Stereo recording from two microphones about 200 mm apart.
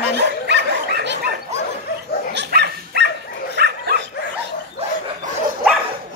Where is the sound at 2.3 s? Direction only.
55° right (ahead or behind).